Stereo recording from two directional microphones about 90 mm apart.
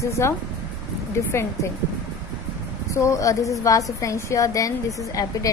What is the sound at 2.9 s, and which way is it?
A woman's voice, 35° left (ahead or behind).